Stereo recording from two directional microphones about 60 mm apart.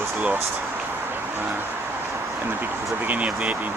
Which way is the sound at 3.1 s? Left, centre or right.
Right.